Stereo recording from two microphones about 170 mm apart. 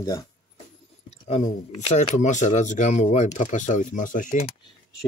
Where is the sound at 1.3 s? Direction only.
45° left (ahead or behind).